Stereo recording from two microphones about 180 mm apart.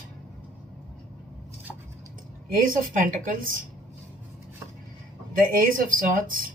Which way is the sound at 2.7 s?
50° right (ahead or behind).